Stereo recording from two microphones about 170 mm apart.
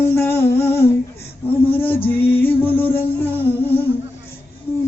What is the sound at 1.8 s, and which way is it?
Music, 10° left (ahead or behind).